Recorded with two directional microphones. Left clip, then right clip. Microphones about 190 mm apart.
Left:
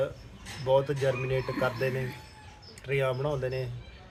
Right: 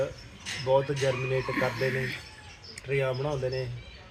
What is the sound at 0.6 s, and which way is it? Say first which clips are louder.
Speech: even; 20° left (ahead or behind).